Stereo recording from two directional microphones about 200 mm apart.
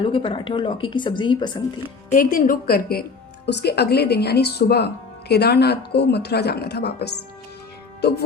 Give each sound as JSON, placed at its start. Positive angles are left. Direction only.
{"t": 0.0, "sound": "a woman's voice", "side_deg": 25}
{"t": 2.0, "sound": "a woman's voice", "side_deg": 45}